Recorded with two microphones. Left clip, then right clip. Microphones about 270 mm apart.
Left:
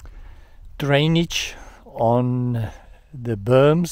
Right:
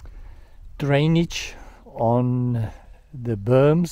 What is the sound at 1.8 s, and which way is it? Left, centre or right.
Speech, left.